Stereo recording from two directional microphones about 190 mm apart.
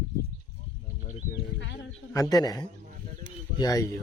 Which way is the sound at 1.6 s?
75° left (ahead or behind).